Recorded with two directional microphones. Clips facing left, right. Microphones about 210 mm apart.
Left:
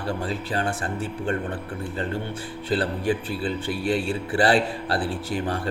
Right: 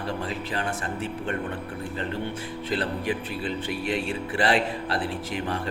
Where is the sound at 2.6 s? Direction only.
30° left (ahead or behind).